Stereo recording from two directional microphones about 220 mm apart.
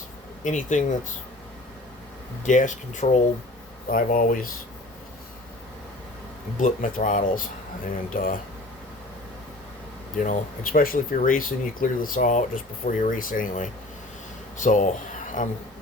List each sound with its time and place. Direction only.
0.4 s speech: 35° left (ahead or behind)
2.4 s speech: 35° left (ahead or behind)
6.6 s speech: 35° left (ahead or behind)
10.2 s speech: 35° left (ahead or behind)